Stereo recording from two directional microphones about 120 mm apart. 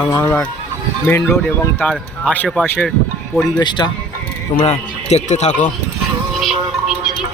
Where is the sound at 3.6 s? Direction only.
40° left (ahead or behind).